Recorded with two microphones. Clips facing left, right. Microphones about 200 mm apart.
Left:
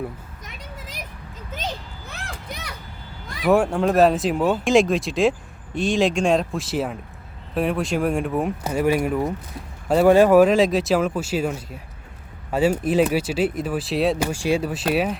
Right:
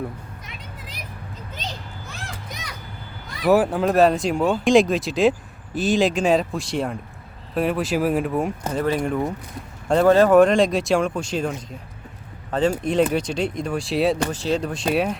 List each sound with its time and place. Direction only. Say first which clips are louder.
0.4 s vehicle: left 1 dB; 45° left (ahead or behind)
2.0 s a sound: left 3 dB; 60° left (ahead or behind)
3.4 s speech: even; centre (ahead or behind)